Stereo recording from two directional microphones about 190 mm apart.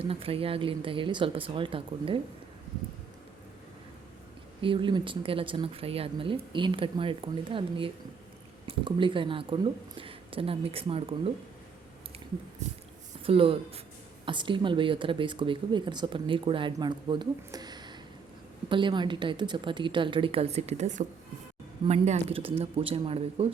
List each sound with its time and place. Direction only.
0.0 s speech: 30° right (ahead or behind)
4.6 s speech: 25° right (ahead or behind)
12.6 s speech: 40° right (ahead or behind)